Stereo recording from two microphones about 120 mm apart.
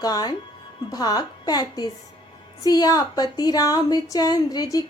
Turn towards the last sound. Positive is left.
turn(degrees=30)  # may be behind; listen again after turning